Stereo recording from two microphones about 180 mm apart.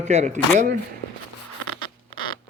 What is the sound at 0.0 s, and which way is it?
Speech, 40° right (ahead or behind).